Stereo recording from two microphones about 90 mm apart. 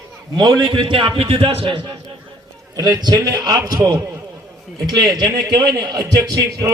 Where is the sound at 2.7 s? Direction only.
50° right (ahead or behind); by 4.0 s 35° right (ahead or behind).